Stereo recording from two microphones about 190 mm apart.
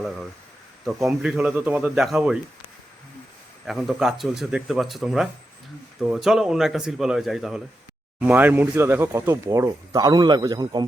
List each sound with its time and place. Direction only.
1.0 s speech: 5° right (ahead or behind)
3.7 s speech: centre (ahead or behind); by 10.8 s 20° right (ahead or behind)